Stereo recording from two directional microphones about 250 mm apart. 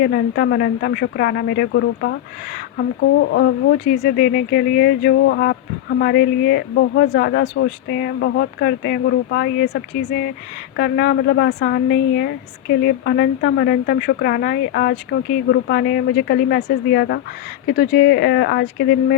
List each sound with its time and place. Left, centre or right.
0.0 s speech: left